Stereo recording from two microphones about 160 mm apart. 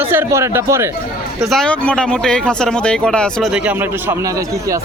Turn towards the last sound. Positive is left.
turn(degrees=-10)  # may be behind; listen again after turning